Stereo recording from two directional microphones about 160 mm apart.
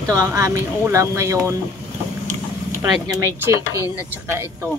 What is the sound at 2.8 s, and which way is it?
Speech, 20° right (ahead or behind).